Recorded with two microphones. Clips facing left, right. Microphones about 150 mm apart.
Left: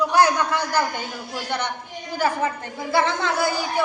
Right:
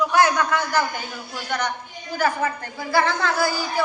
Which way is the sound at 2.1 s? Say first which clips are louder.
Even; 20° left (ahead or behind).